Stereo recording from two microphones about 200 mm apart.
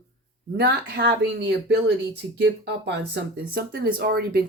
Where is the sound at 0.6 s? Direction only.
55° right (ahead or behind).